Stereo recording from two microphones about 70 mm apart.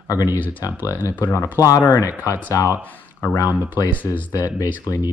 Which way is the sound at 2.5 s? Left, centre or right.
Left.